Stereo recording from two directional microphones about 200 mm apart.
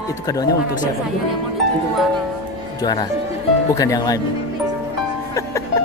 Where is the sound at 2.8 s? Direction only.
20° left (ahead or behind).